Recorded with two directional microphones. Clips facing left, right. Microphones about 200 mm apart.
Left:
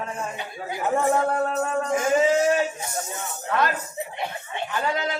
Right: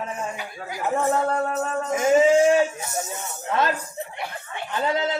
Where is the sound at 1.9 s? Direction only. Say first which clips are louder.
Right 4 dB; 25° right (ahead or behind).